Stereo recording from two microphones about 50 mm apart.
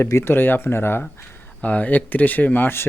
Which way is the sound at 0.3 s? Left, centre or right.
Left.